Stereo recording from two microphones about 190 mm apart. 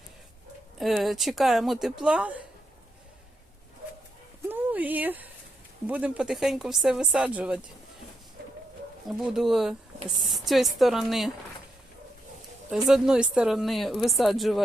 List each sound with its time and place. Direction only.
0.8 s speech: centre (ahead or behind)
4.4 s a sound: 10° right (ahead or behind)
5.9 s speech: 5° right (ahead or behind)
8.4 s a sound: 55° right (ahead or behind)
9.0 s speech: centre (ahead or behind)
12.7 s speech: 5° right (ahead or behind)